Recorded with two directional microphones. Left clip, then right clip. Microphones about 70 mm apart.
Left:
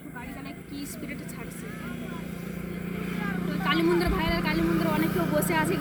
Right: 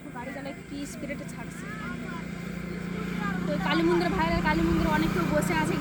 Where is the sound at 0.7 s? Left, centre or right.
Right.